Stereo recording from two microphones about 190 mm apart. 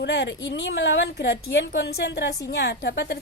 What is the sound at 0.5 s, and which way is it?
A woman's voice, 75° left (ahead or behind).